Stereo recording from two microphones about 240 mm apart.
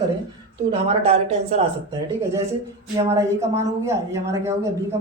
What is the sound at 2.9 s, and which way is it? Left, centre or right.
Speech, centre.